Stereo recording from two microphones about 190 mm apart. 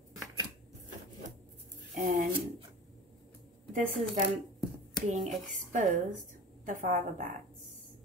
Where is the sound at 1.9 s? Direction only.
45° right (ahead or behind).